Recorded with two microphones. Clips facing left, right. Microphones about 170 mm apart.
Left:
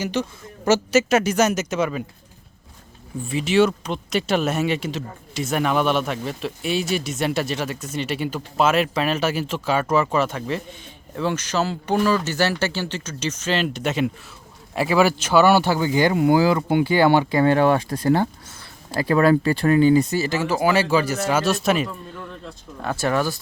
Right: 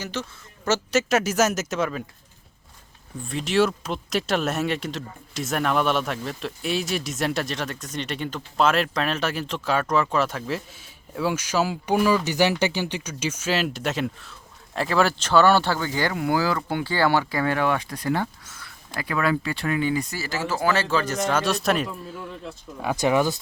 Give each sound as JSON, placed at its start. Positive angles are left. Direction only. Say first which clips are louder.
{"t": 0.0, "sound": "speech", "louder": "left 7 dB", "side_deg": 15}
{"t": 0.7, "sound": "speech", "louder": "left 4 dB", "side_deg": 5}
{"t": 3.2, "sound": "speech", "louder": "left 4 dB", "side_deg": 5}